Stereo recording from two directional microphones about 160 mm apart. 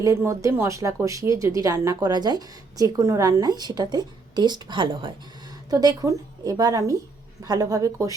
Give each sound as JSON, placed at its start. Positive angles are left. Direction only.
{"t": 0.0, "sound": "speech", "side_deg": -20}